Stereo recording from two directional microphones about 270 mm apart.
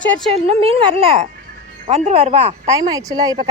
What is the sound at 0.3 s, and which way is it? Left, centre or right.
Speech, right.